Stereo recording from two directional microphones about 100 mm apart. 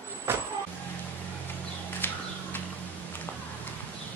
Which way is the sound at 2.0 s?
20° left (ahead or behind).